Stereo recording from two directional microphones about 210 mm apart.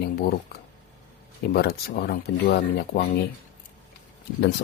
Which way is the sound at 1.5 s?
45° left (ahead or behind).